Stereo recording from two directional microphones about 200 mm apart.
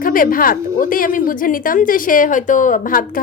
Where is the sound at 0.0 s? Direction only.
45° left (ahead or behind).